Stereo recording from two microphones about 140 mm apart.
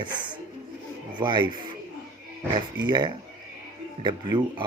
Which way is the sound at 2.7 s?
30° right (ahead or behind).